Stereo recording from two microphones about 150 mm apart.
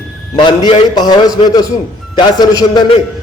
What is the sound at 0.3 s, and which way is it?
A man's voice, 30° left (ahead or behind).